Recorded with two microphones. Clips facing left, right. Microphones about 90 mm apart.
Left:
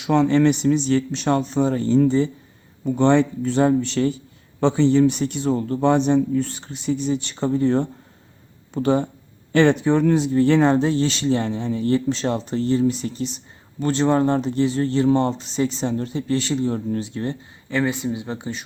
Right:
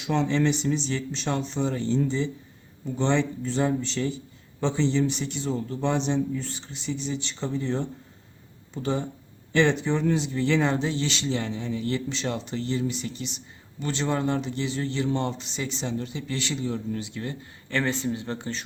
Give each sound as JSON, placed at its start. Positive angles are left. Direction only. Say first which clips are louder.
{"t": 0.0, "sound": "speech", "louder": "left 7 dB", "side_deg": 55}
{"t": 17.7, "sound": "speech", "louder": "left 4 dB", "side_deg": 15}